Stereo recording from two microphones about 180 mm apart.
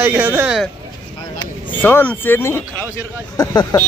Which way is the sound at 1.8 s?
10° left (ahead or behind).